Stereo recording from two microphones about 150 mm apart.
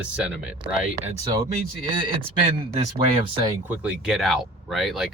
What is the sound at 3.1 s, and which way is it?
Speech, 35° right (ahead or behind).